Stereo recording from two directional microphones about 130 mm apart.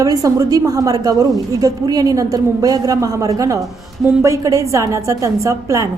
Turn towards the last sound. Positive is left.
turn(degrees=-25)  # may be behind; listen again after turning